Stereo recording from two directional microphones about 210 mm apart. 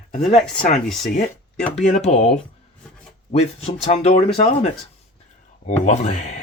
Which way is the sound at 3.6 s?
30° left (ahead or behind).